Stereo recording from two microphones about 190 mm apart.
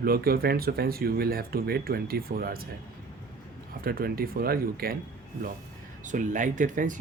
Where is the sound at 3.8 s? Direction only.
50° right (ahead or behind).